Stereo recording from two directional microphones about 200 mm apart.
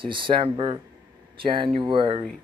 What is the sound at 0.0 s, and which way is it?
Speech, 25° right (ahead or behind).